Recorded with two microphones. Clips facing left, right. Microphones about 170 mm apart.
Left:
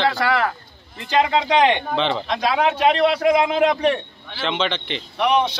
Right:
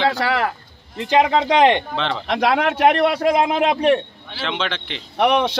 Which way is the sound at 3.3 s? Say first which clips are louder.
Even; 40° right (ahead or behind).